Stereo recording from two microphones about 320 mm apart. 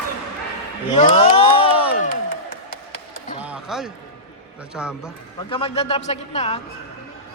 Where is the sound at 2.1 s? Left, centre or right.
Left.